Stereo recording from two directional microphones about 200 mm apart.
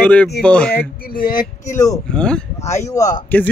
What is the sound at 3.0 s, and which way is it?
Speech, 40° left (ahead or behind).